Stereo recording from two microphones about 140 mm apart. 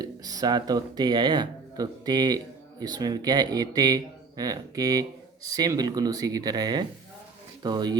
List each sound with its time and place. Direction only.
0.0 s speech: 25° right (ahead or behind)